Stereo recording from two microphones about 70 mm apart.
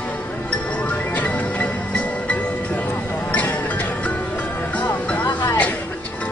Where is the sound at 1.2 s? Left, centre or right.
Left.